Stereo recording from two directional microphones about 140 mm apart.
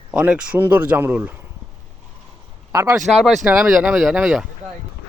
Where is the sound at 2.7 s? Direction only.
20° right (ahead or behind).